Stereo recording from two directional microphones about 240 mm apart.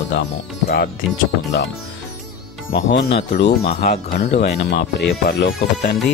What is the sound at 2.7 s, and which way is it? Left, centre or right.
Speech, left.